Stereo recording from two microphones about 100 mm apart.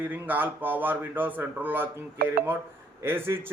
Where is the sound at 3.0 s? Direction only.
20° right (ahead or behind).